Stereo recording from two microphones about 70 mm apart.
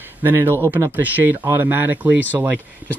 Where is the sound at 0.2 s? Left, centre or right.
Right.